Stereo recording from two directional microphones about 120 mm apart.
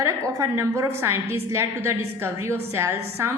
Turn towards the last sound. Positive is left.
turn(degrees=-20)  # may be behind; listen again after turning